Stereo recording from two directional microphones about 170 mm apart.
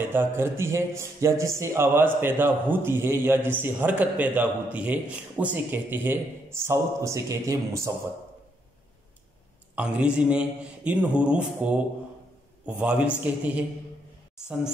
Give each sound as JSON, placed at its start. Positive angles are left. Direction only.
{"t": 0.0, "sound": "speech", "side_deg": -10}
{"t": 9.8, "sound": "speech", "side_deg": -5}